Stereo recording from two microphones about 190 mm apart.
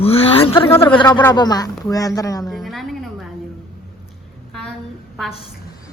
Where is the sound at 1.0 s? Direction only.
25° left (ahead or behind).